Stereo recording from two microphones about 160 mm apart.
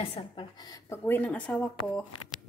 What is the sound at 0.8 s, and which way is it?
Speech, 15° left (ahead or behind).